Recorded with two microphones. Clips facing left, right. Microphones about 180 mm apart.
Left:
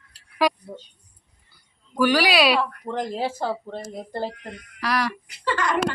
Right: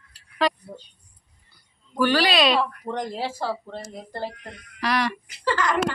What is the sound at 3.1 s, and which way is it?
Speech, 15° left (ahead or behind).